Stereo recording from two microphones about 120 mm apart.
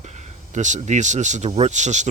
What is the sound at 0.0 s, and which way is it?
Speech, 80° right.